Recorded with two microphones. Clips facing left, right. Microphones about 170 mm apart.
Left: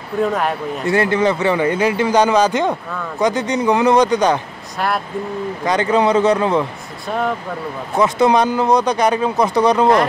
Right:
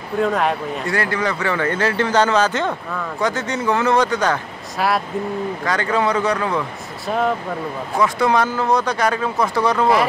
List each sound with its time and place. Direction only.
0.2 s speech: centre (ahead or behind)
0.8 s speech: 25° left (ahead or behind)
4.7 s speech: centre (ahead or behind)
5.7 s speech: 20° left (ahead or behind)
8.0 s speech: 20° left (ahead or behind)